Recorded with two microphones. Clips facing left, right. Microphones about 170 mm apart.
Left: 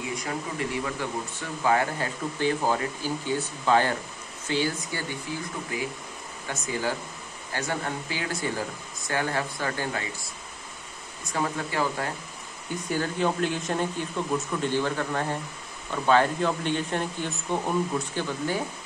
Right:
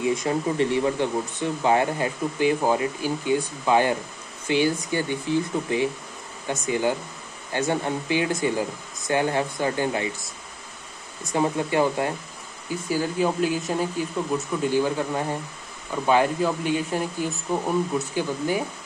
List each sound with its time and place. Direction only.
0.1 s speech: 25° right (ahead or behind)
11.3 s speech: 20° right (ahead or behind)
12.9 s speech: 10° right (ahead or behind)